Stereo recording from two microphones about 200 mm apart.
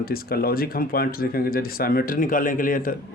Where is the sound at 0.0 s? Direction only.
50° left (ahead or behind).